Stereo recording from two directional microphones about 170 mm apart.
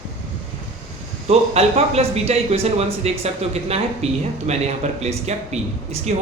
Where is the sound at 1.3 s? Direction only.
40° right (ahead or behind).